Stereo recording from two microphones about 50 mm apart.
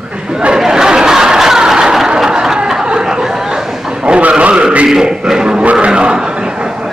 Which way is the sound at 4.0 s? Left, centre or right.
Right.